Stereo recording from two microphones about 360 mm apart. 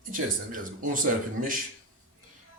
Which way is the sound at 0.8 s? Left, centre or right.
Right.